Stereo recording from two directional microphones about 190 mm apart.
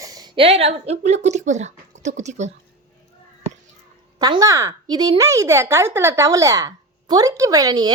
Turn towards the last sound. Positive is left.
turn(degrees=-20)  # may be behind; listen again after turning